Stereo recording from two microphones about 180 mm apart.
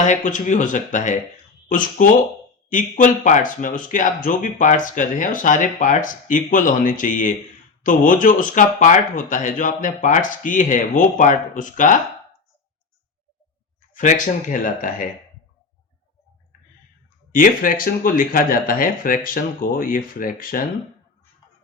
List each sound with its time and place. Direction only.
0.0 s speech: 45° left (ahead or behind)
13.9 s speech: 45° left (ahead or behind)
17.3 s speech: 50° left (ahead or behind)